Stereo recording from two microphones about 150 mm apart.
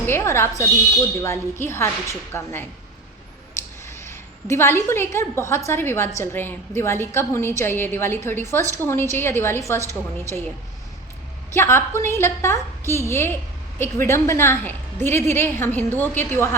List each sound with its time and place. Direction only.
0.1 s a woman's voice: 15° left (ahead or behind)
3.8 s a woman's voice: 15° left (ahead or behind)
11.5 s a woman's voice: 15° left (ahead or behind)